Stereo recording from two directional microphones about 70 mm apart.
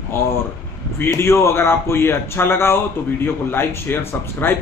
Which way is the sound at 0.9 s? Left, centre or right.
Left.